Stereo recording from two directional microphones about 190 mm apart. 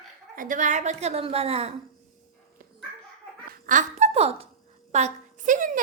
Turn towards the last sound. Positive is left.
turn(degrees=-40)  # may be behind; listen again after turning